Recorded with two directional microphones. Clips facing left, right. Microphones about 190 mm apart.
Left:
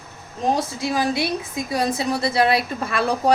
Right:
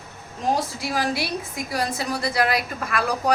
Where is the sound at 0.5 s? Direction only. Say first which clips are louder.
Left 3 dB; 20° left (ahead or behind).